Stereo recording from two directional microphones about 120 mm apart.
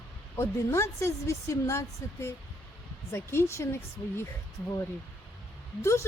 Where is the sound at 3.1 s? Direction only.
25° left (ahead or behind).